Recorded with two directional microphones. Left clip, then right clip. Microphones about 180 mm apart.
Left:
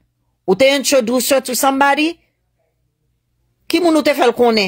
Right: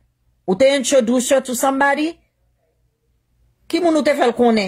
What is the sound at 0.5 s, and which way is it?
Speech, 10° left (ahead or behind).